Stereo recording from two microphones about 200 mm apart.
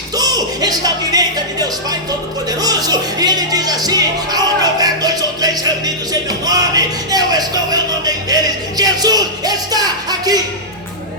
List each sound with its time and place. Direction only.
0.2 s speech: 20° right (ahead or behind)
3.8 s music: 20° right (ahead or behind)